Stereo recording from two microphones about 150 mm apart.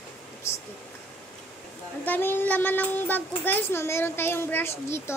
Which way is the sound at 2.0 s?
15° left (ahead or behind).